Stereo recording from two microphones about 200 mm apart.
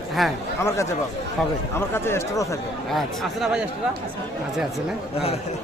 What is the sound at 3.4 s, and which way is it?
Speech, 5° right (ahead or behind).